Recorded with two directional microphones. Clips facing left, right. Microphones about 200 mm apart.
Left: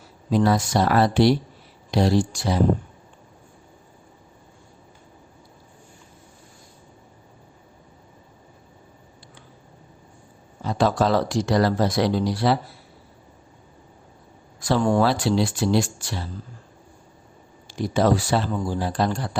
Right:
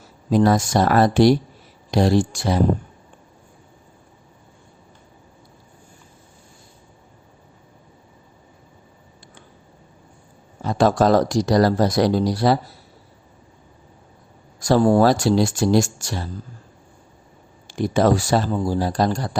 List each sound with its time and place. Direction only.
0.3 s speech: 45° right (ahead or behind)
10.6 s speech: 50° right (ahead or behind)
14.6 s speech: 40° right (ahead or behind)
17.7 s speech: 50° right (ahead or behind)